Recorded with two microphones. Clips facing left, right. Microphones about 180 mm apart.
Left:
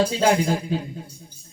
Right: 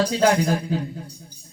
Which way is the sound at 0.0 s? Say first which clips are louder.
Right 1 dB; 25° left (ahead or behind).